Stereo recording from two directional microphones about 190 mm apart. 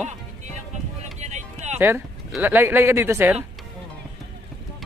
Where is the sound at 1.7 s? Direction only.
10° right (ahead or behind).